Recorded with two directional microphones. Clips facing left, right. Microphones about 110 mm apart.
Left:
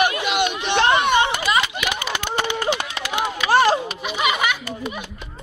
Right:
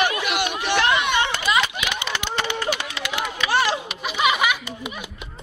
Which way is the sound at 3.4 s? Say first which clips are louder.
Left 5 dB; 45° left (ahead or behind).